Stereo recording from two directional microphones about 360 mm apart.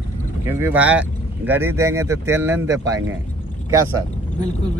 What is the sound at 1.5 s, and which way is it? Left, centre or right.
Speech, right.